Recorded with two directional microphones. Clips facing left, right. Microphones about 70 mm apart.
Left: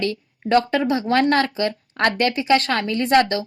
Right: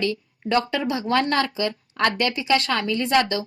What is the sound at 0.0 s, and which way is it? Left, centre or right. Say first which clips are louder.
Speech: left 1 dB; left.